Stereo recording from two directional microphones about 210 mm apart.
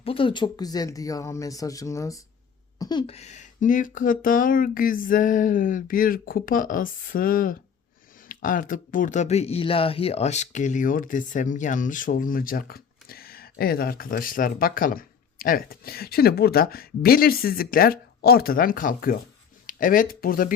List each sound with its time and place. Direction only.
0.0 s speech: 25° left (ahead or behind)
2.7 s a sound: 15° left (ahead or behind)
3.1 s speech: 30° left (ahead or behind)